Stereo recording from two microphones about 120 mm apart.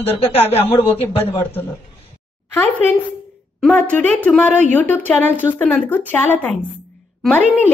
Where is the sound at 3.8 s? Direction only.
15° left (ahead or behind).